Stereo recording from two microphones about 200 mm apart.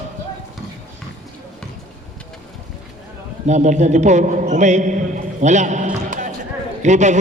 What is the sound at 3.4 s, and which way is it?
A man's voice, 35° right (ahead or behind).